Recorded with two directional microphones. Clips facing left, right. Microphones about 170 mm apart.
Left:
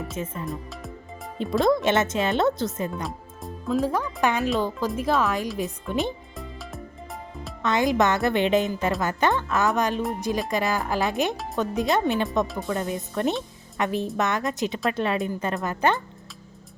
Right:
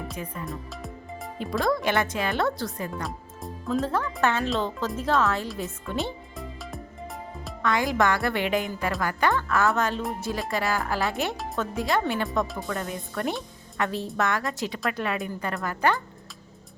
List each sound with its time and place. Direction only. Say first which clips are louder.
0.4 s music: left 2 dB; centre (ahead or behind)
1.4 s a woman's voice: left 5 dB; 20° left (ahead or behind)
2.9 s speech: left 1 dB; centre (ahead or behind); by 6.1 s 15° left (ahead or behind)
6.3 s music: even; centre (ahead or behind)
7.6 s a woman's voice: left 2 dB; 20° left (ahead or behind)